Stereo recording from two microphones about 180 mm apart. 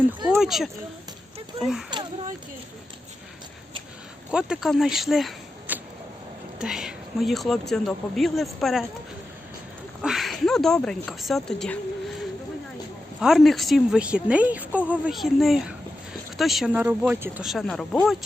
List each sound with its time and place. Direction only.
0.3 s speech: centre (ahead or behind)
1.9 s a sound: 25° right (ahead or behind)
4.3 s a woman's voice: 5° right (ahead or behind)
10.0 s a woman's voice: centre (ahead or behind)
13.1 s a woman's voice: centre (ahead or behind)